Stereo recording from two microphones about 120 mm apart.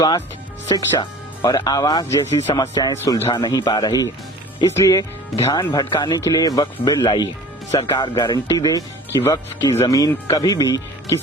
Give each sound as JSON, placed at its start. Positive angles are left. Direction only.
{"t": 0.7, "sound": "speech", "side_deg": 30}
{"t": 2.9, "sound": "speech", "side_deg": 20}
{"t": 3.2, "sound": "speech", "side_deg": 35}
{"t": 5.5, "sound": "speech", "side_deg": 40}